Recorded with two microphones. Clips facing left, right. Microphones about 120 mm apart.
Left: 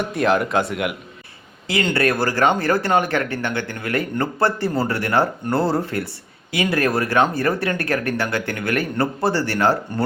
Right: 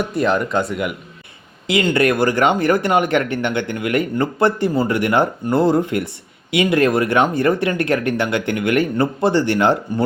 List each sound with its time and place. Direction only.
0.1 s speech: centre (ahead or behind)
1.6 s speech: 20° right (ahead or behind)